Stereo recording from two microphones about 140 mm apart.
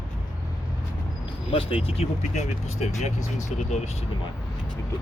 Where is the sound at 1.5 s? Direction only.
40° left (ahead or behind).